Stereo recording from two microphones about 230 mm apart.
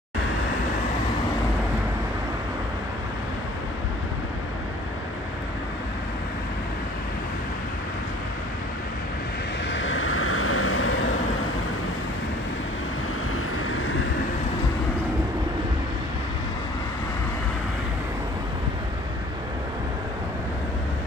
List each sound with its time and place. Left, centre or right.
9.7 s vehicle: left